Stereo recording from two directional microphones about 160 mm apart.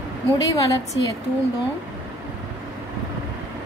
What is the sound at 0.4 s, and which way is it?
Speech, 20° left (ahead or behind).